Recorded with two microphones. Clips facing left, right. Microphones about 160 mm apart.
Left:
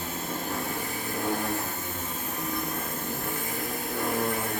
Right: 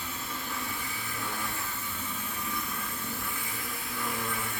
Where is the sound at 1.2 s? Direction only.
45° left (ahead or behind).